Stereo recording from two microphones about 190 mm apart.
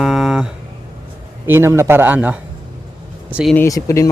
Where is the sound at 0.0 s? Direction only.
Centre (ahead or behind).